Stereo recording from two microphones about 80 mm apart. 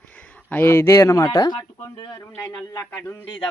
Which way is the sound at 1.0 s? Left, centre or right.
Left.